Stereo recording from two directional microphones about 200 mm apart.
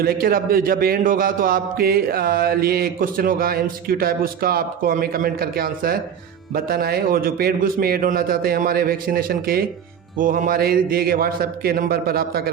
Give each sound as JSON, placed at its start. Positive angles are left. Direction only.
{"t": 0.0, "sound": "a man's voice", "side_deg": -50}